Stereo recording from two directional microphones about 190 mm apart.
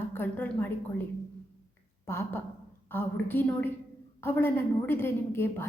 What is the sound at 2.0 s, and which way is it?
A woman's voice, 15° left (ahead or behind).